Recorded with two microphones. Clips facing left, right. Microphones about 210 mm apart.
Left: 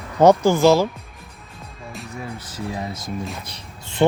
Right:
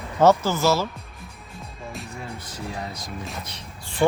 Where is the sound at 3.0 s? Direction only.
Centre (ahead or behind).